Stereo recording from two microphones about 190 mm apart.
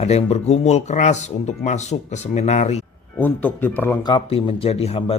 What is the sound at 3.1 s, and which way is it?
Speech, 10° left (ahead or behind).